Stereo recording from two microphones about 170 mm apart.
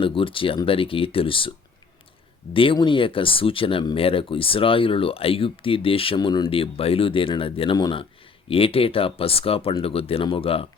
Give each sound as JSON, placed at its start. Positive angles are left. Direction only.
{"t": 0.0, "sound": "speech", "side_deg": 30}